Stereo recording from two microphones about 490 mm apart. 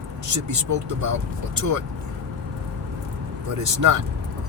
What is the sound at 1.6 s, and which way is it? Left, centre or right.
Speech, right.